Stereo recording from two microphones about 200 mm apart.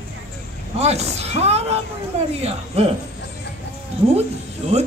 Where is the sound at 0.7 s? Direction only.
30° right (ahead or behind).